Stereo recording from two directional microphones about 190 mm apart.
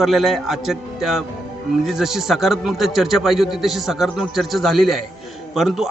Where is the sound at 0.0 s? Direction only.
Centre (ahead or behind).